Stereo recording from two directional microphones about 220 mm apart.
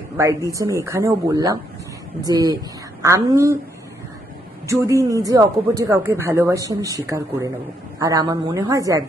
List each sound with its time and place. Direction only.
0.2 s a woman's voice: 15° right (ahead or behind)
4.6 s speech: 15° right (ahead or behind)